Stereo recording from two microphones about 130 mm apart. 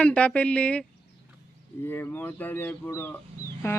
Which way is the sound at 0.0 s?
10° left (ahead or behind).